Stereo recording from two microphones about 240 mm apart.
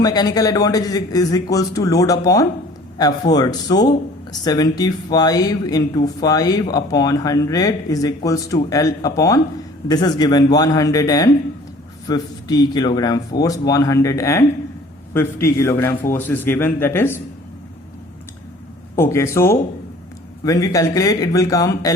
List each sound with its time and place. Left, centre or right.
0.0 s speech: centre
18.9 s speech: centre